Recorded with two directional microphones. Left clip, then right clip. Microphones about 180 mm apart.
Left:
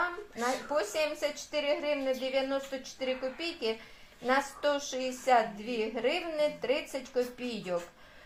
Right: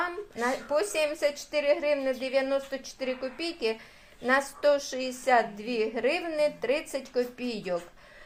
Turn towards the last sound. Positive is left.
turn(degrees=-35)  # may be behind; listen again after turning